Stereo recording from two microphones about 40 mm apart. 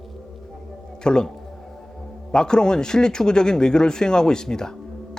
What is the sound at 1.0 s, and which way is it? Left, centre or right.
Speech, left.